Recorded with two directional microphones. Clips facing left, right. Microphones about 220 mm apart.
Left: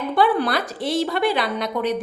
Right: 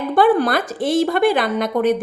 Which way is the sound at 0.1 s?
45° right (ahead or behind).